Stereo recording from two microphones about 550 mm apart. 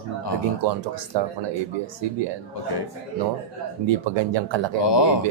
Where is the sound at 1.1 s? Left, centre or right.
Right.